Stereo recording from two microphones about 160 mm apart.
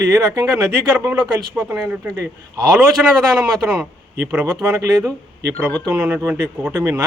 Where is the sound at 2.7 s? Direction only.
5° right (ahead or behind).